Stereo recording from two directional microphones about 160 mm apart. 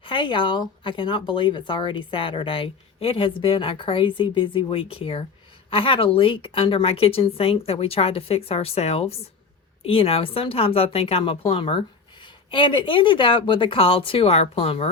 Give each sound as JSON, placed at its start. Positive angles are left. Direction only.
{"t": 0.0, "sound": "speech", "side_deg": 30}